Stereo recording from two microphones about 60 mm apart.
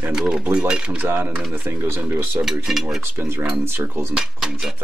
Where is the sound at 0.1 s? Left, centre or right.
Centre.